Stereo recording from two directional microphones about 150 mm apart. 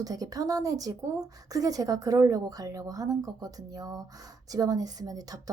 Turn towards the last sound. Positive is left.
turn(degrees=-25)  # may be behind; listen again after turning